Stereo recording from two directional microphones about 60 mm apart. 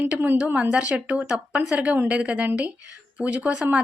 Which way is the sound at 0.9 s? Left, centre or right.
Centre.